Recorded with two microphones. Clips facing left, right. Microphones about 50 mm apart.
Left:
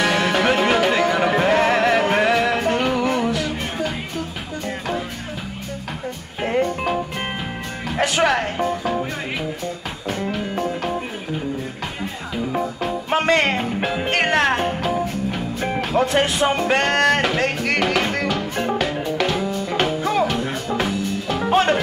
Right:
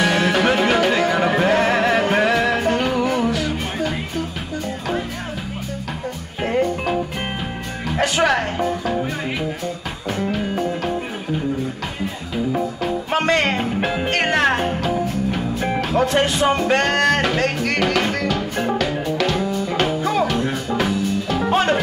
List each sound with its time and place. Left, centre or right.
0.0 s music: centre
6.4 s music: centre
8.0 s music: centre
10.0 s music: centre
12.5 s music: centre
13.6 s music: centre